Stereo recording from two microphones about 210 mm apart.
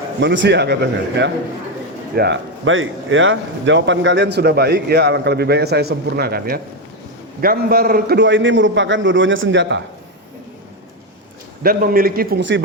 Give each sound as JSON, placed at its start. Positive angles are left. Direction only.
{"t": 0.2, "sound": "a man's voice", "side_deg": -60}
{"t": 11.6, "sound": "speech", "side_deg": -45}